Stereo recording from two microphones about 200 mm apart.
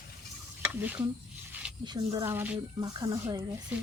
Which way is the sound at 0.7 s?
10° right (ahead or behind).